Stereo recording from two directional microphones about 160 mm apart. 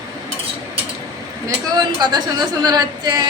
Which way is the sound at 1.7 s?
25° right (ahead or behind).